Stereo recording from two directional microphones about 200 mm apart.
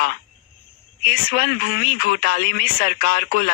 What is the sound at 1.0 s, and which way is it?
Speech, 50° left (ahead or behind).